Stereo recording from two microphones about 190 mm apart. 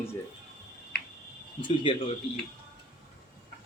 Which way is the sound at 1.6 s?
25° left (ahead or behind).